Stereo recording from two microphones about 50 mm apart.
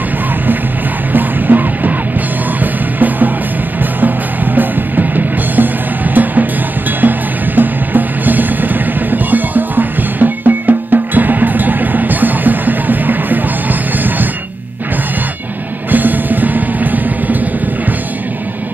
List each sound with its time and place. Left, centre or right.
1.1 s music: right
4.6 s music: right
7.0 s music: right
15.9 s music: right